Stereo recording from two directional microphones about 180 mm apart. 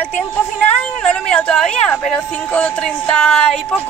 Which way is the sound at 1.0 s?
5° left (ahead or behind).